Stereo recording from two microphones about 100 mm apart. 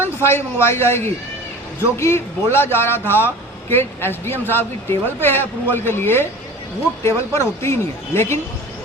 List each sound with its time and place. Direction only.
0.0 s speech: 25° left (ahead or behind)